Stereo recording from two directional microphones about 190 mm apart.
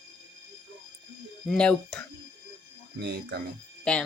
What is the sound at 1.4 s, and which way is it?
Speech, 5° left (ahead or behind).